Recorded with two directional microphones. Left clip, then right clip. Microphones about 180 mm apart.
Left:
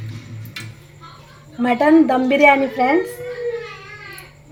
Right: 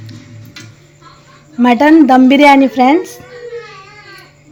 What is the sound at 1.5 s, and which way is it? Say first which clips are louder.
A woman's voice: right 6 dB; 55° right (ahead or behind).